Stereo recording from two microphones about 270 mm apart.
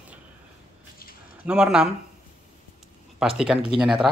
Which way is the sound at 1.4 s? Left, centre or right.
Centre.